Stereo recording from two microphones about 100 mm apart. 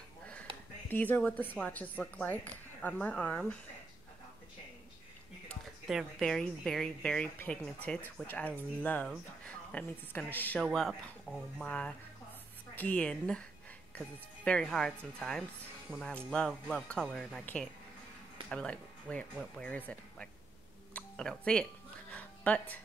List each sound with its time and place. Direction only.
0.2 s a sound: 15° left (ahead or behind)
0.8 s a woman's voice: 20° left (ahead or behind)
5.9 s a woman's voice: centre (ahead or behind); by 10.6 s 15° left (ahead or behind)
10.6 s speech: centre (ahead or behind)
11.3 s a woman's voice: 10° left (ahead or behind)
22.1 s music: 15° left (ahead or behind)